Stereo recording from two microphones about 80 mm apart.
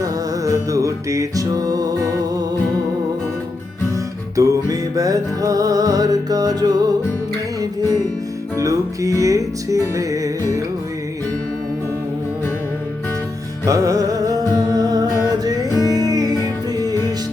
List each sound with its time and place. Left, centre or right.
0.0 s music: right
4.4 s music: right
8.5 s music: right
13.7 s music: right